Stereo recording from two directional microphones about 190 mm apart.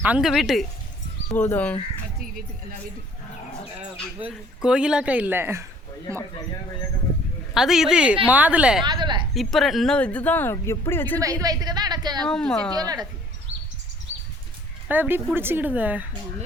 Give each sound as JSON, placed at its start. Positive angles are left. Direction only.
{"t": 0.0, "sound": "speech", "side_deg": -5}
{"t": 4.3, "sound": "speech", "side_deg": -5}
{"t": 7.5, "sound": "speech", "side_deg": 0}
{"t": 8.8, "sound": "a sound", "side_deg": -25}
{"t": 9.3, "sound": "speech", "side_deg": 0}
{"t": 11.2, "sound": "a woman's voice", "side_deg": -15}
{"t": 12.2, "sound": "speech", "side_deg": 5}
{"t": 12.7, "sound": "speech", "side_deg": -20}
{"t": 14.8, "sound": "speech", "side_deg": -10}